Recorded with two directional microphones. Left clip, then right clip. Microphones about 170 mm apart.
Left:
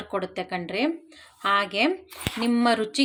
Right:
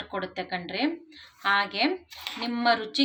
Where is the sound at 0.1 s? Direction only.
50° left (ahead or behind).